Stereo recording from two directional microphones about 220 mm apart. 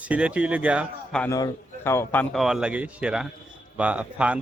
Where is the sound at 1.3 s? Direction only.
15° left (ahead or behind); by 4.4 s 5° right (ahead or behind).